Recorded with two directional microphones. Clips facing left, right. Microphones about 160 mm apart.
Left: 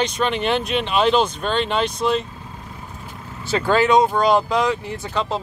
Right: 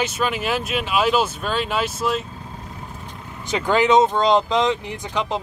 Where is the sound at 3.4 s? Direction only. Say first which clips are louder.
Left 1 dB; 15° right (ahead or behind).